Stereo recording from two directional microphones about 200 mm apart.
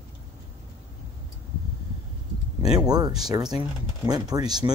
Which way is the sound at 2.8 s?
20° right (ahead or behind).